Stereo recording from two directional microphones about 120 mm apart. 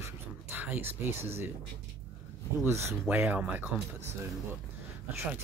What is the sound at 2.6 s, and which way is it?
Speech, 20° right (ahead or behind).